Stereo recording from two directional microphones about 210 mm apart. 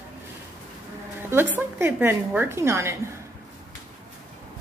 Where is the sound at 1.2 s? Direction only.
10° right (ahead or behind).